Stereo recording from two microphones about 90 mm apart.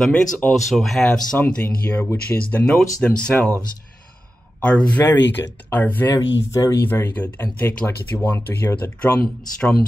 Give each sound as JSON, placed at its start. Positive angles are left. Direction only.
{"t": 0.0, "sound": "speech", "side_deg": 10}
{"t": 2.6, "sound": "speech", "side_deg": 10}
{"t": 4.6, "sound": "speech", "side_deg": 15}
{"t": 6.1, "sound": "speech", "side_deg": 40}
{"t": 6.8, "sound": "speech", "side_deg": 20}